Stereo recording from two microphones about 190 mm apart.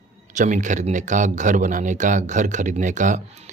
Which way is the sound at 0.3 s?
40° right (ahead or behind).